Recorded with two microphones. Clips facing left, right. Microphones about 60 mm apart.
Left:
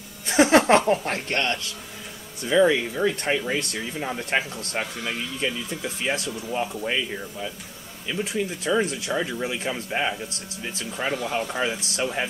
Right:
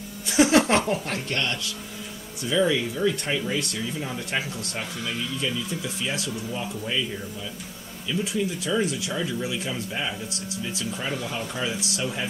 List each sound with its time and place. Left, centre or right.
0.3 s speech: left
4.9 s speech: centre
5.7 s speech: left